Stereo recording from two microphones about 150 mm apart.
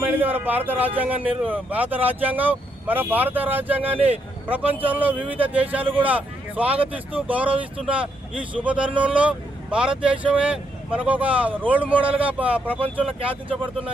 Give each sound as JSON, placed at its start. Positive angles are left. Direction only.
{"t": 0.0, "sound": "speech", "side_deg": -15}
{"t": 5.8, "sound": "speech", "side_deg": -35}
{"t": 6.1, "sound": "speech", "side_deg": -10}
{"t": 13.1, "sound": "speech", "side_deg": -35}